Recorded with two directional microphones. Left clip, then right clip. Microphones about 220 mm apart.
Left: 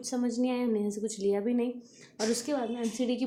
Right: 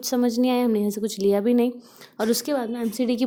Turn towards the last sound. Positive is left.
turn(degrees=-40)  # may be behind; listen again after turning